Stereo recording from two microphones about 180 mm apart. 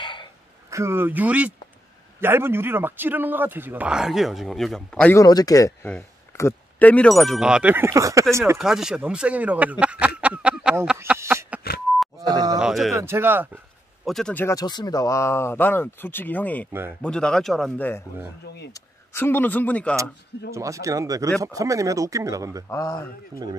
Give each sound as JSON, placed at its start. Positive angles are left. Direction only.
{"t": 0.0, "sound": "a sound", "side_deg": 25}
{"t": 0.7, "sound": "a man's voice", "side_deg": -15}
{"t": 5.1, "sound": "speech", "side_deg": 20}
{"t": 8.5, "sound": "speech", "side_deg": 0}
{"t": 12.2, "sound": "groan", "side_deg": -20}
{"t": 12.5, "sound": "a sound", "side_deg": 0}
{"t": 12.9, "sound": "a man's voice", "side_deg": -15}
{"t": 14.0, "sound": "speech", "side_deg": 5}
{"t": 18.4, "sound": "speech", "side_deg": 65}
{"t": 19.1, "sound": "speech", "side_deg": 10}
{"t": 20.5, "sound": "a man's voice", "side_deg": -15}
{"t": 22.7, "sound": "speech", "side_deg": 15}